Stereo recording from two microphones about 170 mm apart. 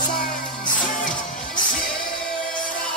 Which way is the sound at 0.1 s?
55° left (ahead or behind).